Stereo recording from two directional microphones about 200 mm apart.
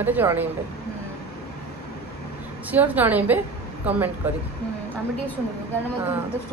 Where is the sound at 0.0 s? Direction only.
10° right (ahead or behind).